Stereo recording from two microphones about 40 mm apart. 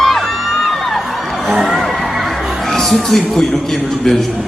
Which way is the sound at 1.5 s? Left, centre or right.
Centre.